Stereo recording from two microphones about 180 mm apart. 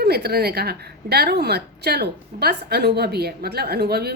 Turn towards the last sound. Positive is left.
turn(degrees=-60)  # may be behind; listen again after turning